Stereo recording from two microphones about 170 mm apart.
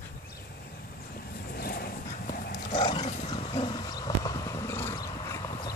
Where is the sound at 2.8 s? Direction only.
25° left (ahead or behind).